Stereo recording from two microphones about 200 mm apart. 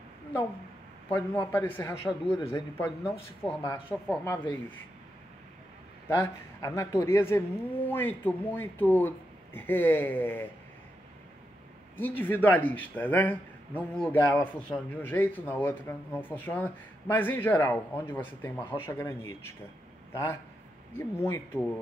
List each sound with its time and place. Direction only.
1.1 s a man's voice: 10° left (ahead or behind)
4.2 s a man's voice: 10° left (ahead or behind)
6.0 s a man's voice: 10° left (ahead or behind)
12.0 s a man's voice: 10° left (ahead or behind)
20.9 s a man's voice: 15° left (ahead or behind)